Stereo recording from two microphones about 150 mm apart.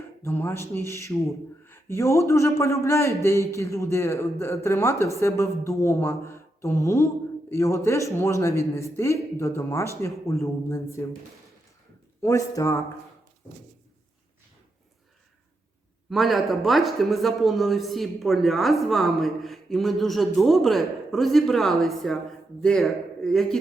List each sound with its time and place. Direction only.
0.2 s speech: 15° left (ahead or behind)
12.2 s speech: 20° left (ahead or behind)
16.0 s speech: centre (ahead or behind)